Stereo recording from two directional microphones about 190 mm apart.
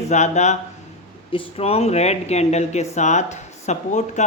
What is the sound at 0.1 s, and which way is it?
A man's voice, 40° left (ahead or behind).